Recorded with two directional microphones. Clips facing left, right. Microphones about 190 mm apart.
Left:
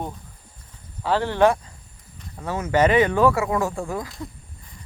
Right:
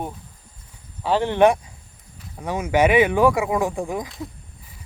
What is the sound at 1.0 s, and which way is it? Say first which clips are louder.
Speech: right 2 dB; 20° right (ahead or behind).